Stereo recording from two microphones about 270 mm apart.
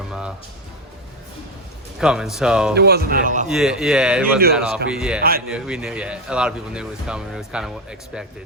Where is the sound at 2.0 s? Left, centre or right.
Centre.